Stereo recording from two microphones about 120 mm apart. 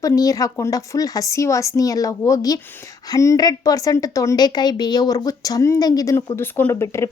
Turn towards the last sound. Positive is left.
turn(degrees=25)  # may be behind; listen again after turning